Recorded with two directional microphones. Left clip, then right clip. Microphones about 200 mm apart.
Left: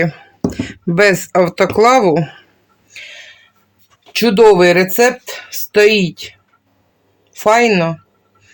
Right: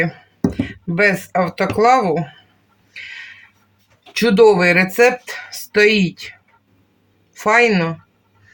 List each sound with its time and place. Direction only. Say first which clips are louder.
0.5 s speech: left 5 dB; 50° left (ahead or behind)
2.9 s a sound: right 1 dB; 40° left (ahead or behind)
4.1 s speech: left 3 dB; 35° left (ahead or behind)
7.3 s speech: left 3 dB; 35° left (ahead or behind)